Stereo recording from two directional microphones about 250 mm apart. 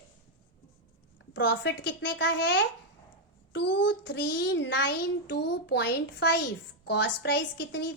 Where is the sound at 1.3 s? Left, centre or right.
Left.